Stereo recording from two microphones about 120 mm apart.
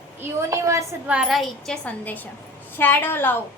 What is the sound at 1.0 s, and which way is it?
A woman's voice, 5° right (ahead or behind).